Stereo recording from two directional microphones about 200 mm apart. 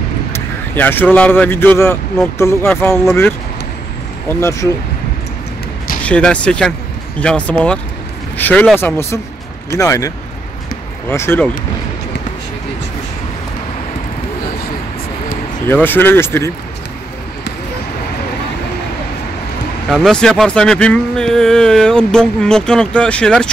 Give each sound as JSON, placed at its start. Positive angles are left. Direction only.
{"t": 0.3, "sound": "speech", "side_deg": 10}
{"t": 6.0, "sound": "speech", "side_deg": 5}
{"t": 15.7, "sound": "speech", "side_deg": 10}
{"t": 19.9, "sound": "speech", "side_deg": 5}